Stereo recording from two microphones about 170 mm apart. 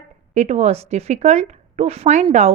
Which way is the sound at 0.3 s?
40° right (ahead or behind).